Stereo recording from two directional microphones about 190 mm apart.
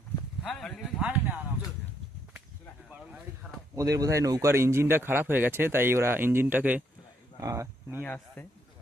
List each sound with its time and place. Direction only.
0.4 s speech: centre (ahead or behind)
3.8 s speech: 15° right (ahead or behind)
8.0 s speech: 5° left (ahead or behind)